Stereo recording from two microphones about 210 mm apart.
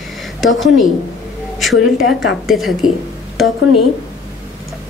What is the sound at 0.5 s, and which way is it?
Speech, 65° left (ahead or behind).